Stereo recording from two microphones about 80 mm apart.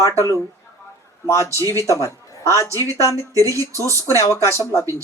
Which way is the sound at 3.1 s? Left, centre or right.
Right.